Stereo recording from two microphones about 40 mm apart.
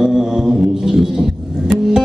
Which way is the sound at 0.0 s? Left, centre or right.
Centre.